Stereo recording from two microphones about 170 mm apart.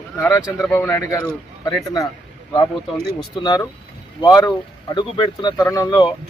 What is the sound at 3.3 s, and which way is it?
Speech, 25° left (ahead or behind).